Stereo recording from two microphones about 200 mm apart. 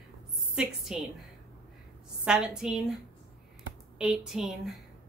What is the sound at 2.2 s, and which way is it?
Speech, 5° right (ahead or behind).